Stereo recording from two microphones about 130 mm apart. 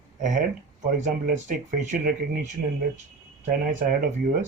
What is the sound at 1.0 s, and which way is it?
Speech, 90° right.